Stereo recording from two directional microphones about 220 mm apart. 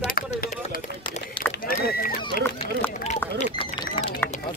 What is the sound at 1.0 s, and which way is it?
Run, 20° left (ahead or behind).